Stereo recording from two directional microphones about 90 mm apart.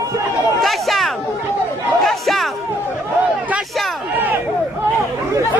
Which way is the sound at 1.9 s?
Centre (ahead or behind).